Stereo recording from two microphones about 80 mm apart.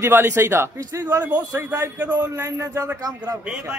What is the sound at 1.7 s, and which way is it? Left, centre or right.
Speech, right.